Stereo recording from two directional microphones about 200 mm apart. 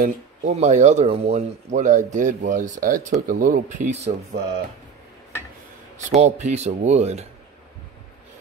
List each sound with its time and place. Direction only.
0.0 s speech: 35° right (ahead or behind)
6.0 s speech: 35° right (ahead or behind)